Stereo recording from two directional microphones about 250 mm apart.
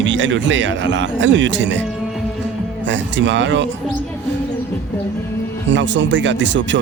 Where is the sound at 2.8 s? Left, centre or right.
Right.